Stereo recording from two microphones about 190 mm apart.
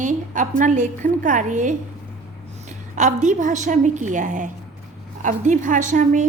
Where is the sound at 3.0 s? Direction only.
40° right (ahead or behind).